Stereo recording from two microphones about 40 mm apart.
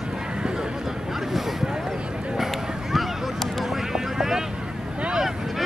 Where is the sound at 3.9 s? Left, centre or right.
Centre.